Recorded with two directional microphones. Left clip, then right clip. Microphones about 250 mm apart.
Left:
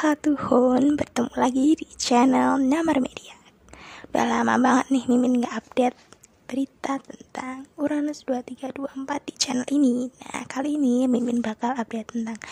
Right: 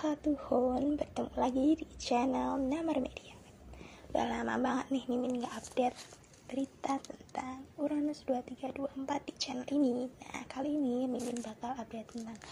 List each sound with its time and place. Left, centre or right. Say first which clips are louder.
0.0 s speech: left 12 dB; left